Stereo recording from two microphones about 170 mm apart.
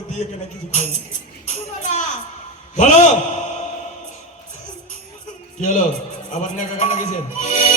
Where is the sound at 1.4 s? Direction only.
50° left (ahead or behind).